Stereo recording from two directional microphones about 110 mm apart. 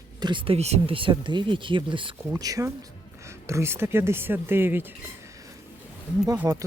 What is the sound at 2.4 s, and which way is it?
Speech, 30° right (ahead or behind).